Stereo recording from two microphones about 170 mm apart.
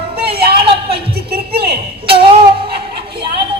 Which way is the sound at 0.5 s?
35° right (ahead or behind).